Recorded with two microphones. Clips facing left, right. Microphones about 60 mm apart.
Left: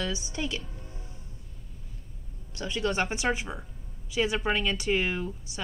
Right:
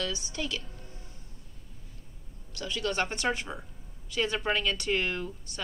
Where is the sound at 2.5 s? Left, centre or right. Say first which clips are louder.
Left 3 dB; left.